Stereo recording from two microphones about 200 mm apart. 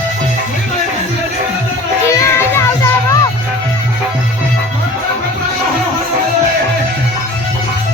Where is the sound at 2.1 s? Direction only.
15° left (ahead or behind).